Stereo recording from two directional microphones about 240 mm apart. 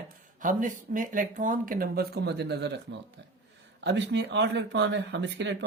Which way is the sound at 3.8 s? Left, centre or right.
Right.